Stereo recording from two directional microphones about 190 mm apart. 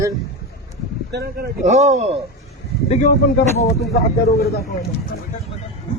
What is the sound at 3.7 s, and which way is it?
Speech, 55° left (ahead or behind).